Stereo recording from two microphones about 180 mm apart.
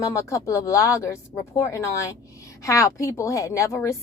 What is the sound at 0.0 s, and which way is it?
A woman's voice, 15° left (ahead or behind).